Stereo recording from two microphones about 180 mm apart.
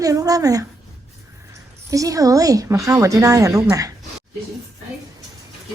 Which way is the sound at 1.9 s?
20° right (ahead or behind).